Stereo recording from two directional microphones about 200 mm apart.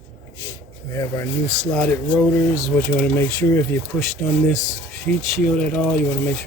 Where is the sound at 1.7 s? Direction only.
5° left (ahead or behind).